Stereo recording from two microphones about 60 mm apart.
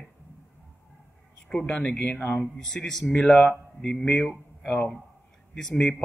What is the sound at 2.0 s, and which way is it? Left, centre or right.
Speech, left.